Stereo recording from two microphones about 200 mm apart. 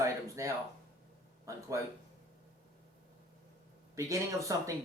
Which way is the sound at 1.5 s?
15° right (ahead or behind).